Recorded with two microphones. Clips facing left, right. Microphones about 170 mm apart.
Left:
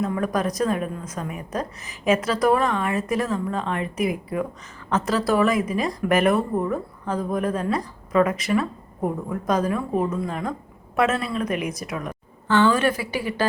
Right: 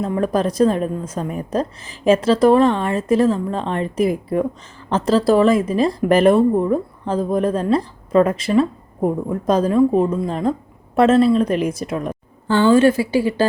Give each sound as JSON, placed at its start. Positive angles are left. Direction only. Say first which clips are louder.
{"t": 0.0, "sound": "a woman's voice", "louder": "right 5 dB", "side_deg": -30}